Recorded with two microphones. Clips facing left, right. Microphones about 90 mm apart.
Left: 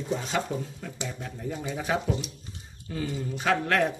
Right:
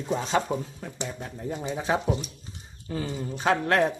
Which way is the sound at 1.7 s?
30° right (ahead or behind).